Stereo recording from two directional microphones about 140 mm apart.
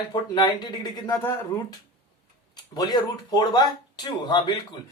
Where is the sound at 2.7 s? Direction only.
30° left (ahead or behind).